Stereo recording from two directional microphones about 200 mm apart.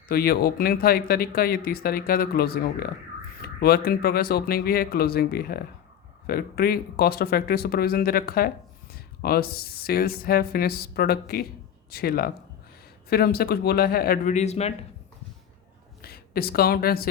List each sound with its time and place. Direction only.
0.1 s speech: 50° left (ahead or behind); by 14.7 s 35° left (ahead or behind)
16.0 s a woman's voice: 50° left (ahead or behind)